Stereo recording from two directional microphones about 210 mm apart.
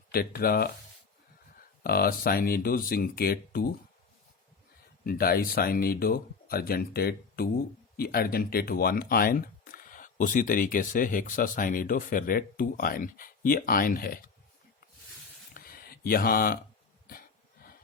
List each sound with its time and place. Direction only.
0.1 s speech: 45° left (ahead or behind)
1.8 s speech: 45° left (ahead or behind)
5.0 s speech: 45° left (ahead or behind)
15.5 s a sound: 45° left (ahead or behind)